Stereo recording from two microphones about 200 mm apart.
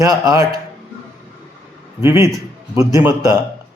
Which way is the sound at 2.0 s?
15° right (ahead or behind).